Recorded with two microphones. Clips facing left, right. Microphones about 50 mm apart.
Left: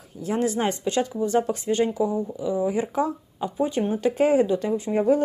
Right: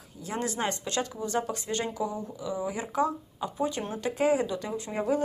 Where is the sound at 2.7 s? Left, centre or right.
Left.